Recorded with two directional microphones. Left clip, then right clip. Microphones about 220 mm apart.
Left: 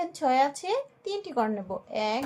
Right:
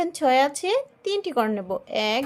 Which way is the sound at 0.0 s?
40° right (ahead or behind).